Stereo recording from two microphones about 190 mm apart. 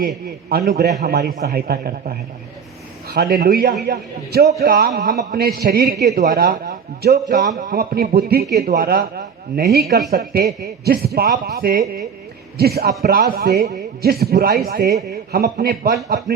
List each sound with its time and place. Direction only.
0.5 s a man's voice: 55° right (ahead or behind)